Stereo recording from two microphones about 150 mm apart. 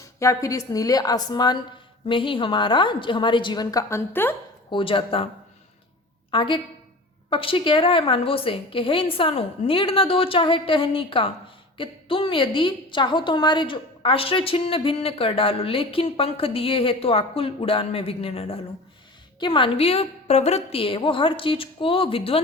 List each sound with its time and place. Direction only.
0.2 s a woman's voice: 20° left (ahead or behind)
4.7 s a woman's voice: 35° left (ahead or behind)
6.3 s a woman's voice: 35° left (ahead or behind)